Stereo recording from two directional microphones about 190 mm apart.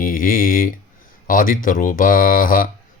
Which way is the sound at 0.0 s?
45° left (ahead or behind).